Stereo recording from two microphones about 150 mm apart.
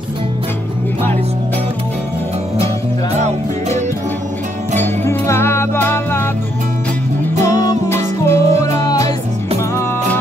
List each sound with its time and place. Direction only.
3.2 s music: 45° right (ahead or behind)
4.7 s music: 15° left (ahead or behind)
7.4 s music: 20° left (ahead or behind)